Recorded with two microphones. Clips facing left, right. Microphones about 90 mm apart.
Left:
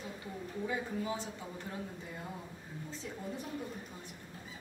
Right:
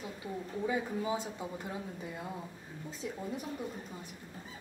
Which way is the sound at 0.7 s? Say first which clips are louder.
Right 4 dB; 15° right (ahead or behind).